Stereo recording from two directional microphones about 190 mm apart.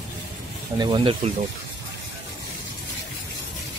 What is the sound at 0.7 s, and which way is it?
Speech, 25° right (ahead or behind).